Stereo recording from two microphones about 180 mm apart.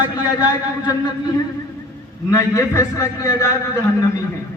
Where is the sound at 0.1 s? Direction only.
20° left (ahead or behind).